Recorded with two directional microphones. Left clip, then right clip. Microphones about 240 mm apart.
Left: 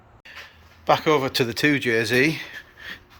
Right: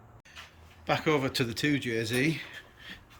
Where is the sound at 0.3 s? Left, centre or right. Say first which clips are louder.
Left 8 dB; centre.